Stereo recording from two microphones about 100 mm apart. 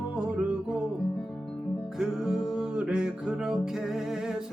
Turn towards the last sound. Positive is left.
turn(degrees=-5)  # may be behind; listen again after turning